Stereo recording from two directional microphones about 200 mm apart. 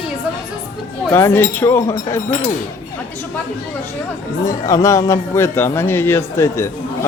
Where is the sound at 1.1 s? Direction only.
10° left (ahead or behind).